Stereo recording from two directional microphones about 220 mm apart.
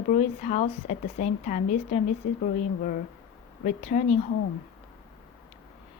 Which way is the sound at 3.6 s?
35° left (ahead or behind).